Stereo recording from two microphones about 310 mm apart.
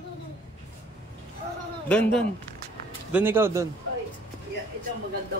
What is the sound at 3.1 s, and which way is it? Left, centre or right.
Speech, centre.